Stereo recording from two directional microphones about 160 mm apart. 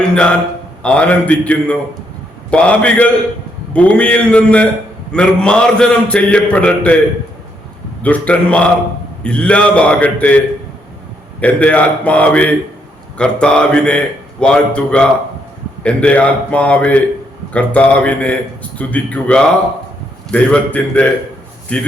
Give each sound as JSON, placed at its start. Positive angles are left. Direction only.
{"t": 0.1, "sound": "a man's voice", "side_deg": 5}
{"t": 8.0, "sound": "a man's voice", "side_deg": 10}